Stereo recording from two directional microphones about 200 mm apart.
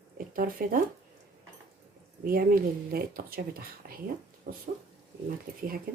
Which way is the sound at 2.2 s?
45° right (ahead or behind).